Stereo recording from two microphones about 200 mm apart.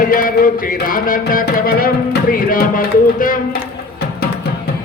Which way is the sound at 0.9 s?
45° left (ahead or behind).